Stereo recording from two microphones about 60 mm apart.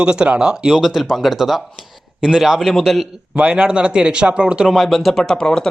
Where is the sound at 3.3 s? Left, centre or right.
Centre.